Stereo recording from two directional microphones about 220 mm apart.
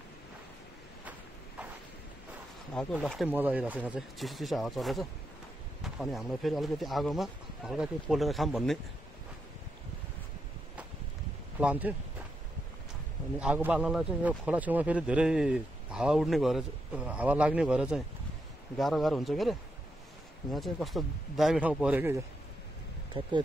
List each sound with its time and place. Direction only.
2.7 s a man's voice: 5° left (ahead or behind)
11.6 s speech: 5° right (ahead or behind)
13.4 s a man's voice: 5° right (ahead or behind)
20.5 s a man's voice: centre (ahead or behind)
23.2 s speech: 20° right (ahead or behind)